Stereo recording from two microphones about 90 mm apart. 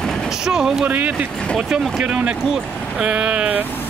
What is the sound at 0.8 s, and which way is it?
Speech, 20° right (ahead or behind).